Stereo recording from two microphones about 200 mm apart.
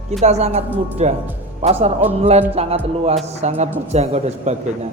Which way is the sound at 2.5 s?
30° right (ahead or behind).